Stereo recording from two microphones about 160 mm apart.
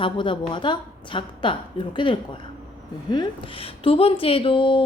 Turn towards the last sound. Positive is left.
turn(degrees=35)  # may be behind; listen again after turning